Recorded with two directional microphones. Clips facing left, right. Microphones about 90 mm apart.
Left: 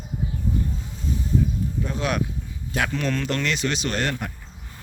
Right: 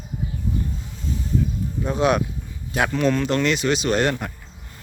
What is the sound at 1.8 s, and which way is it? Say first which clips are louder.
Speech: right 8 dB; 20° right (ahead or behind).